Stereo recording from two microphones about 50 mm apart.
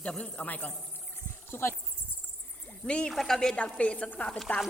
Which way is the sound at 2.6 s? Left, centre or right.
Centre.